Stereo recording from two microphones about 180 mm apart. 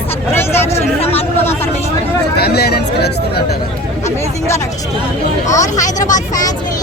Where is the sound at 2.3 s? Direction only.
60° left (ahead or behind).